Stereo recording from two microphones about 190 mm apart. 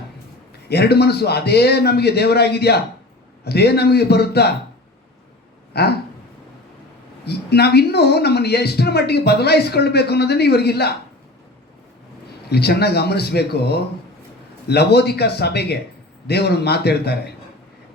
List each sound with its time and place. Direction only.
0.7 s speech: 60° left (ahead or behind)
5.7 s speech: 55° left (ahead or behind)
7.3 s speech: 60° left (ahead or behind)
12.5 s speech: 60° left (ahead or behind)